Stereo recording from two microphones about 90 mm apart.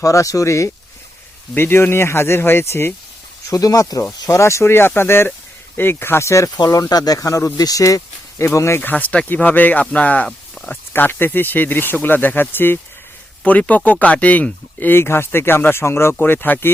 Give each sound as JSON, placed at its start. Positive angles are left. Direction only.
{"t": 0.0, "sound": "speech", "side_deg": 35}
{"t": 1.5, "sound": "speech", "side_deg": 25}
{"t": 3.5, "sound": "speech", "side_deg": 40}
{"t": 10.2, "sound": "a sound", "side_deg": 10}
{"t": 10.9, "sound": "speech", "side_deg": 25}